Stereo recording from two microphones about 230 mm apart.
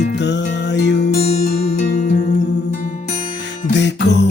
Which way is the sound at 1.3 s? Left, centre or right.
Left.